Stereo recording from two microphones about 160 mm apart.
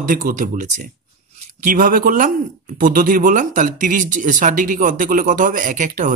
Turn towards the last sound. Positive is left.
turn(degrees=-55)  # may be behind; listen again after turning